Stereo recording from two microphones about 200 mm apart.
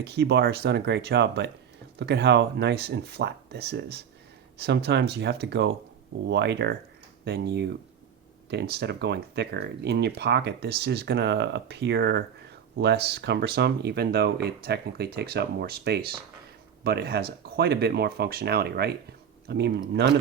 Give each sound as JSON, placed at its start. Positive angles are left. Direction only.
{"t": 0.0, "sound": "speech", "side_deg": -55}